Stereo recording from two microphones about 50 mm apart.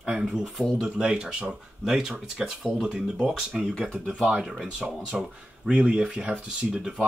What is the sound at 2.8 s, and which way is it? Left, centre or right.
Speech, centre.